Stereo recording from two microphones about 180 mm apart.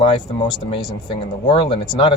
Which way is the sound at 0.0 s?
30° left (ahead or behind).